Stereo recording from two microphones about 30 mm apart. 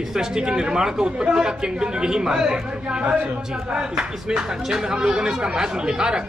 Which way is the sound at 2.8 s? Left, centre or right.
Right.